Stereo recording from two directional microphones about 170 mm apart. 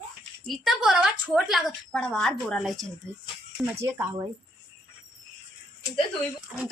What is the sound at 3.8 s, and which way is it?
Speech, 15° right (ahead or behind).